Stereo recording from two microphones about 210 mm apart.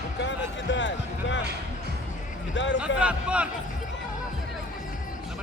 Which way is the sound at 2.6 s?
60° left (ahead or behind).